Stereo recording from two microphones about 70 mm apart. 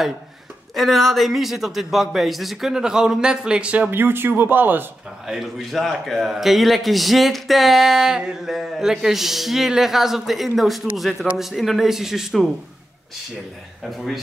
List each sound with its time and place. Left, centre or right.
0.7 s a man's voice: centre
3.9 s speech: right
5.2 s a man's voice: centre
13.8 s a man's voice: centre